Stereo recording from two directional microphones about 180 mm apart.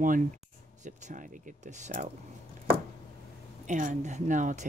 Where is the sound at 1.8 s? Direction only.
40° right (ahead or behind).